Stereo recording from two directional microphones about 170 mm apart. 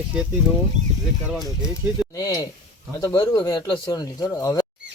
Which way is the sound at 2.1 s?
20° left (ahead or behind).